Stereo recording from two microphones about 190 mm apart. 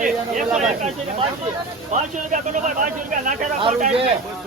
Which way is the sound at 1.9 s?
40° right (ahead or behind).